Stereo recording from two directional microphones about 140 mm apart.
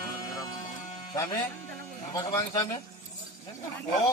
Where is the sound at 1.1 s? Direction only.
25° left (ahead or behind).